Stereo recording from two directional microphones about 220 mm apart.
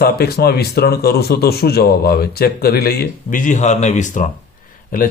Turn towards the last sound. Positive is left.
turn(degrees=40)  # may be behind; listen again after turning